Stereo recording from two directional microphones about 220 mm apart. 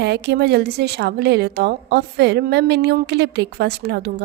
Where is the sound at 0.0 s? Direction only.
50° right (ahead or behind).